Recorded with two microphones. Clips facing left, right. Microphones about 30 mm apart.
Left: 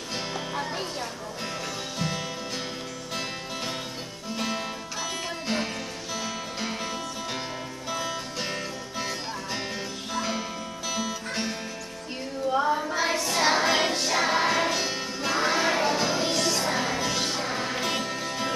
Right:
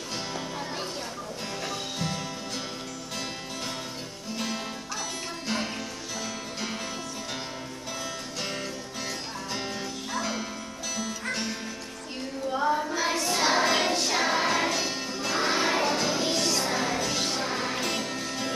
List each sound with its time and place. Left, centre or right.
0.3 s music: centre
4.4 s music: centre
6.2 s music: centre
7.9 s music: centre
12.6 s child singing: centre
13.3 s music: centre